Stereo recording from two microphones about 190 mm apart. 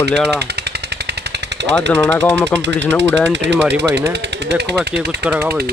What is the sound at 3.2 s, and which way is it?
Speech, 65° right (ahead or behind).